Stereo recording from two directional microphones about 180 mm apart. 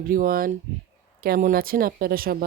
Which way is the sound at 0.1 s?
50° right (ahead or behind).